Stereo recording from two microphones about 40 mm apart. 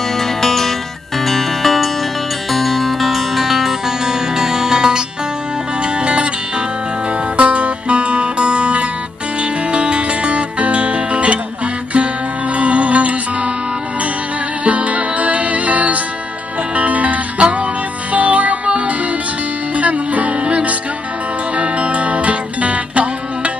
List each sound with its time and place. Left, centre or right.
0.2 s music: centre; by 6.2 s right
7.3 s music: right
12.5 s music: right
14.6 s music: right